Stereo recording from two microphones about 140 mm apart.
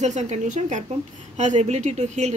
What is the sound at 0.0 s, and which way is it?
A woman's voice, 55° right (ahead or behind).